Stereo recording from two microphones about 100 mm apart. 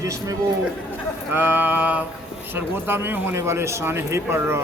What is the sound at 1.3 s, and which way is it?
A man's voice, 20° right (ahead or behind).